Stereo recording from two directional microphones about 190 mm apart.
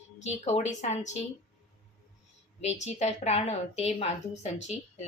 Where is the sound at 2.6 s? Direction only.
35° left (ahead or behind).